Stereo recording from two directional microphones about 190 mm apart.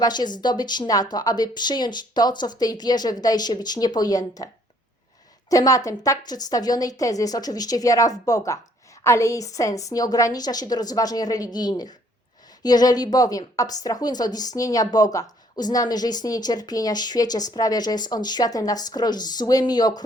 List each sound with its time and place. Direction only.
0.0 s a woman's voice: 20° left (ahead or behind)
5.5 s a woman's voice: 20° left (ahead or behind)